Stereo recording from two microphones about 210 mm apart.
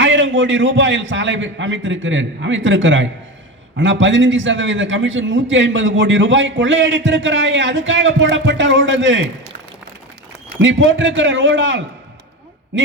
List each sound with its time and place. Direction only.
0.0 s a man's voice: 60° right (ahead or behind)
10.6 s a man's voice: 65° right (ahead or behind)